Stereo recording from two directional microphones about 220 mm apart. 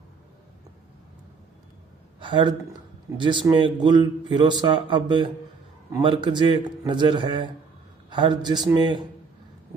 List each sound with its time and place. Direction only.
2.1 s a man's voice: 20° right (ahead or behind)